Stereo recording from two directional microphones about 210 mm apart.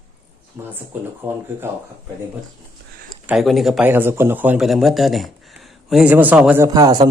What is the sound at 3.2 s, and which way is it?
Speech, centre (ahead or behind).